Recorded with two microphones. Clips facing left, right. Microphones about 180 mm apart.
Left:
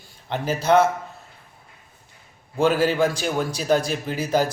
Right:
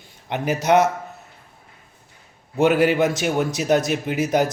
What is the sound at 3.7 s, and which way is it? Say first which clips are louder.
Speech: right 2 dB; 70° right (ahead or behind).